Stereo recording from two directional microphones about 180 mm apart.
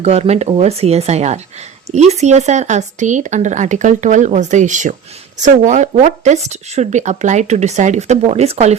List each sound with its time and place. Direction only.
0.0 s speech: 35° right (ahead or behind)